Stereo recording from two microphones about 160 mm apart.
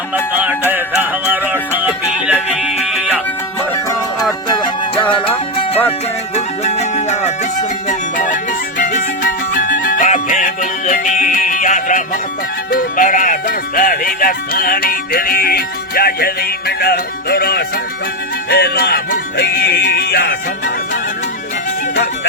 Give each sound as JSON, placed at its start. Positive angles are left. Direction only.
{"t": 0.7, "sound": "music", "side_deg": -10}
{"t": 4.3, "sound": "music", "side_deg": 25}